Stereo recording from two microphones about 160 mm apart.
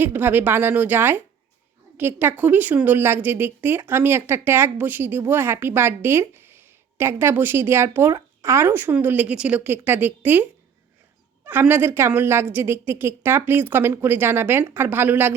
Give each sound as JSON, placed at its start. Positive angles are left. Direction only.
{"t": 0.0, "sound": "a woman's voice", "side_deg": -15}